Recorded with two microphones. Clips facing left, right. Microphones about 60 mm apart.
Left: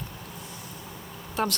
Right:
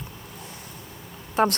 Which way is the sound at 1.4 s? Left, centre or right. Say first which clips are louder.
Right 7 dB; right.